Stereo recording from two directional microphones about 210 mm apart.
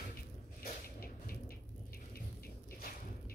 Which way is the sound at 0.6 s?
45° left (ahead or behind).